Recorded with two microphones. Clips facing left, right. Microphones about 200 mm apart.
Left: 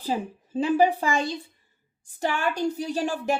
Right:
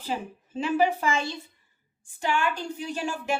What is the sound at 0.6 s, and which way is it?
Speech, 35° left (ahead or behind).